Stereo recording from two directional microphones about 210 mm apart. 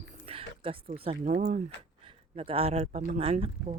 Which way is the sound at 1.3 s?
40° right (ahead or behind).